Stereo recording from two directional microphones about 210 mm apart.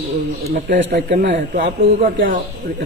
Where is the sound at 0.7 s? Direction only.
60° right (ahead or behind).